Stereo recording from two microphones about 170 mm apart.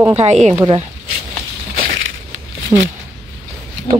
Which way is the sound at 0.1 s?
40° right (ahead or behind).